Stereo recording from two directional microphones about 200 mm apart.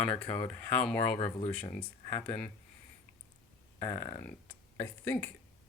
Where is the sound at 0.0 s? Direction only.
5° left (ahead or behind).